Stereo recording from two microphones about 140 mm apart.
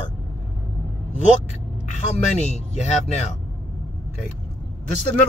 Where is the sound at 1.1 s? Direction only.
55° left (ahead or behind).